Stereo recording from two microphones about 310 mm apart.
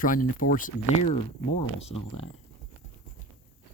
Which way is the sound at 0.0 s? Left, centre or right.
Left.